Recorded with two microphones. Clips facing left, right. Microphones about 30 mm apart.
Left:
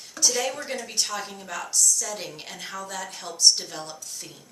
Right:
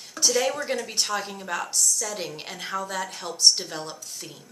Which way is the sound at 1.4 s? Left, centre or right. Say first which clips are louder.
Right 3 dB; right.